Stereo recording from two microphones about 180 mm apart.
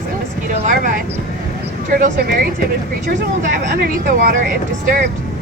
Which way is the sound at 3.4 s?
55° right (ahead or behind).